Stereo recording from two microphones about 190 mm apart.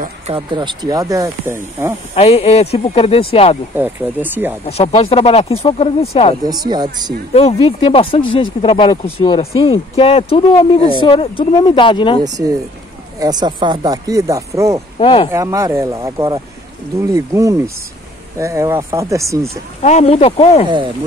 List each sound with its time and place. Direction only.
0.3 s speech: 25° right (ahead or behind)
2.1 s speech: 30° left (ahead or behind)
3.7 s speech: 10° right (ahead or behind)
4.6 s speech: 30° left (ahead or behind)
6.4 s speech: 20° right (ahead or behind)
7.3 s speech: 30° left (ahead or behind)
12.2 s speech: 20° right (ahead or behind)
15.0 s speech: 30° left (ahead or behind)
15.3 s speech: 15° right (ahead or behind)
19.8 s speech: 35° left (ahead or behind)